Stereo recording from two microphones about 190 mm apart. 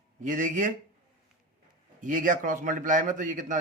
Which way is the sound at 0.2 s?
40° right (ahead or behind).